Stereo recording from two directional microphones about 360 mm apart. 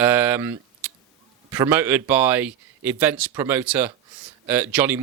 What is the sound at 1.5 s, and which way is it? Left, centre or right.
A man's voice, centre.